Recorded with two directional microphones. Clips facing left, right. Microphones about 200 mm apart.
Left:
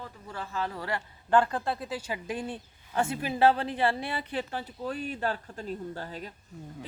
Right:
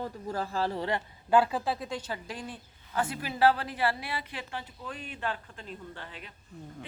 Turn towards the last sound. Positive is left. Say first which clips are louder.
# left 7 dB
turn(degrees=40)  # may be behind; listen again after turning